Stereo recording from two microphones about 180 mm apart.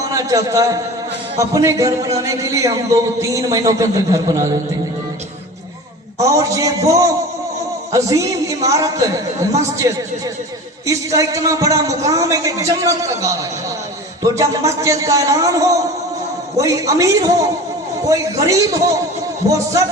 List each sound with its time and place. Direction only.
0.0 s a man's voice: 20° right (ahead or behind)
6.1 s a man's voice: 15° right (ahead or behind)